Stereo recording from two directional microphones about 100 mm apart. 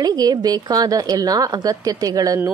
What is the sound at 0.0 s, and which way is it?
Speech, 40° right (ahead or behind).